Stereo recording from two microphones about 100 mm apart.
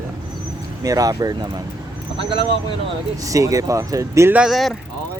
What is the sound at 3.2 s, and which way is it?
Speech, 35° right (ahead or behind).